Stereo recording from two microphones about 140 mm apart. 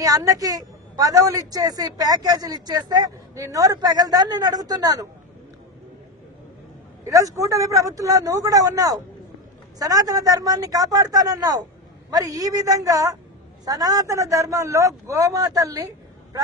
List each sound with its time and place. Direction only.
0.0 s a woman's voice: 25° right (ahead or behind)
7.1 s a woman's voice: 25° right (ahead or behind)